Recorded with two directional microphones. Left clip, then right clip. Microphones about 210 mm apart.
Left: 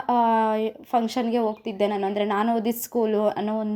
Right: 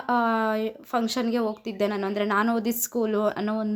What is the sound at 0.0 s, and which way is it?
Speech, centre (ahead or behind).